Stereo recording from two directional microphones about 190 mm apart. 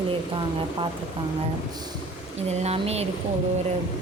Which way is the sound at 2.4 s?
35° right (ahead or behind).